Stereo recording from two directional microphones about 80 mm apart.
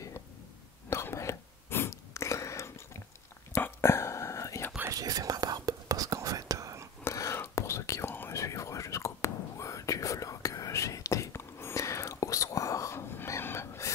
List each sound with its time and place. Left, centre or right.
0.8 s whispering: left
4.9 s whispering: right
7.1 s whispering: left